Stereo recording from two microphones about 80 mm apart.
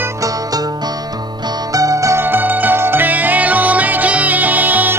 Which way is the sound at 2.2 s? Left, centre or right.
Right.